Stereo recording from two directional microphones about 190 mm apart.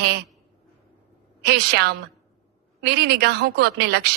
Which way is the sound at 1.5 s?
60° right (ahead or behind).